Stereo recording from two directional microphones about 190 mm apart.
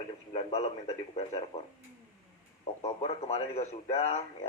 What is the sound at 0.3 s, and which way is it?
Speech, 30° left (ahead or behind).